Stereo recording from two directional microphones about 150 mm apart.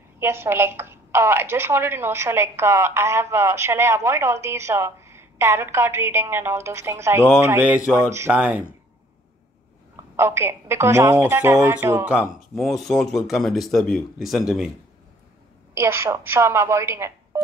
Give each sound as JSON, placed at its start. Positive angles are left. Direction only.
{"t": 0.2, "sound": "a woman's voice", "side_deg": -15}
{"t": 10.1, "sound": "a woman's voice", "side_deg": -15}
{"t": 15.7, "sound": "a woman's voice", "side_deg": -15}